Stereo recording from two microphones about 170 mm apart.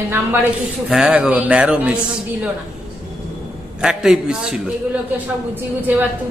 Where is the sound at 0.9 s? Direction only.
5° right (ahead or behind).